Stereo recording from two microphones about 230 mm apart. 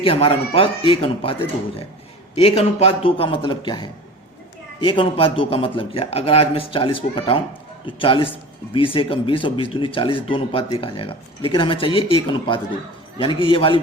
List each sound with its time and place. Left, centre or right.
0.0 s speech: left